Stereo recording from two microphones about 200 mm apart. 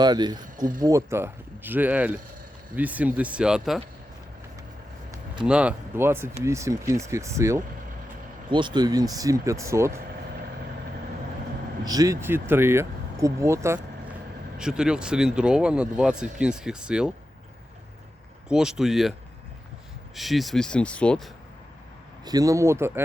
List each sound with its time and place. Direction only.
0.0 s speech: 20° right (ahead or behind)
0.4 s speech: 40° right (ahead or behind)
0.8 s speech: 15° right (ahead or behind)
5.5 s speech: 5° right (ahead or behind)
11.9 s speech: 15° right (ahead or behind)
14.6 s speech: 5° right (ahead or behind)
18.4 s speech: 5° right (ahead or behind)
20.1 s speech: centre (ahead or behind)
22.2 s speech: 20° right (ahead or behind)